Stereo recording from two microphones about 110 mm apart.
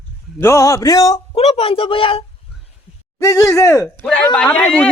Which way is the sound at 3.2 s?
30° left (ahead or behind).